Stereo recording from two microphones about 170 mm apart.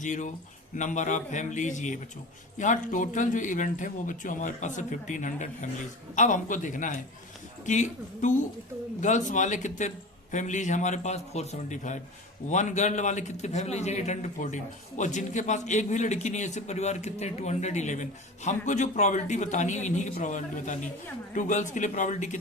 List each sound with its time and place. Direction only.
0.0 s a man's voice: 45° left (ahead or behind)